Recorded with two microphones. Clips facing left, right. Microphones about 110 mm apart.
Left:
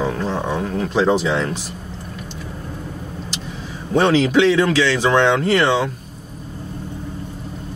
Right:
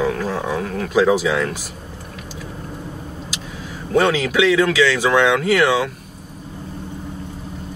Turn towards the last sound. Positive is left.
turn(degrees=-5)  # may be behind; listen again after turning